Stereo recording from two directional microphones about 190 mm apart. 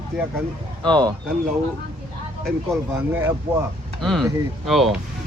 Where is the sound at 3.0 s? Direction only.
10° right (ahead or behind).